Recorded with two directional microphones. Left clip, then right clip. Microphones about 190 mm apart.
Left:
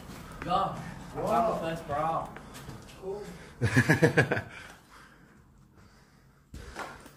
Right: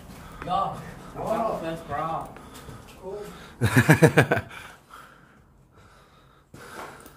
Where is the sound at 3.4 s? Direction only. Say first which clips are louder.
Right 5 dB; 35° right (ahead or behind).